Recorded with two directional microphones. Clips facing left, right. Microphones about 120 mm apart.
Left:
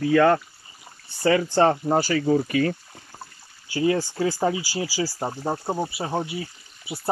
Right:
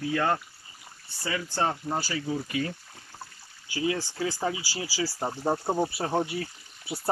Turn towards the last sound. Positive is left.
turn(degrees=5)  # may be behind; listen again after turning